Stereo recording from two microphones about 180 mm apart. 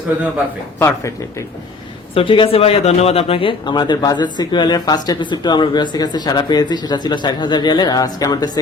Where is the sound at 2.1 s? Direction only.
30° left (ahead or behind).